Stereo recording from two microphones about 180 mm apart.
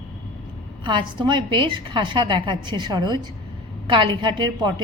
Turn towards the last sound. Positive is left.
turn(degrees=-25)  # may be behind; listen again after turning